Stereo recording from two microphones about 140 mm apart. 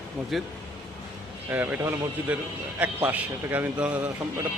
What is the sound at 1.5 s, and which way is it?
A man's voice, 10° right (ahead or behind).